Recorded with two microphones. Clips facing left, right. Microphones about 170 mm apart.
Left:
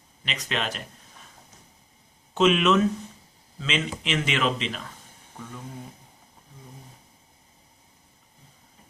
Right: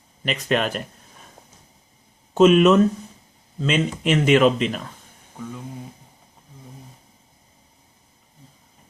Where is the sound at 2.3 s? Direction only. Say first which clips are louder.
Right 7 dB; 45° right (ahead or behind).